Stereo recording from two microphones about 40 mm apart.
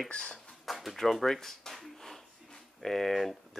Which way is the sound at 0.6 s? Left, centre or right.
Centre.